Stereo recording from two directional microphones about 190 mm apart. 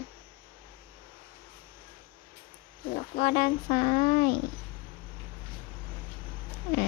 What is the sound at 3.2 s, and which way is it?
Speech, 45° left (ahead or behind).